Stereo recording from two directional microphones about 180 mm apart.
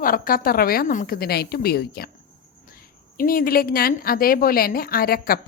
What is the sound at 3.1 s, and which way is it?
A woman's voice, 55° left (ahead or behind).